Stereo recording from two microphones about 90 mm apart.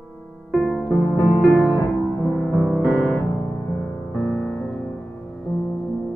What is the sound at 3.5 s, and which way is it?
Music, 40° left (ahead or behind).